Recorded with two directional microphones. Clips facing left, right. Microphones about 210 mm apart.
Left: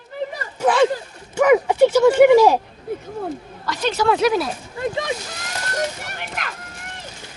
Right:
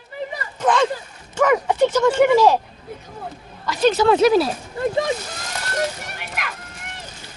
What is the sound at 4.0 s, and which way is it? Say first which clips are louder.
Speech: right 2 dB; 25° right (ahead or behind).